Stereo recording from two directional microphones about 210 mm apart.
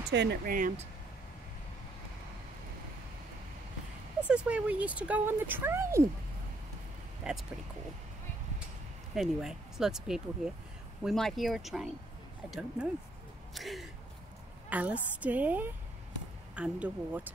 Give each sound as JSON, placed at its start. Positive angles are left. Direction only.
{"t": 0.1, "sound": "speech", "side_deg": -55}
{"t": 4.3, "sound": "speech", "side_deg": -5}
{"t": 7.3, "sound": "speech", "side_deg": -5}
{"t": 9.1, "sound": "speech", "side_deg": 0}